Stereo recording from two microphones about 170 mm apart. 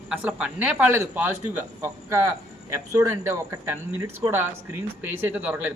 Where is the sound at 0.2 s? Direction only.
5° right (ahead or behind).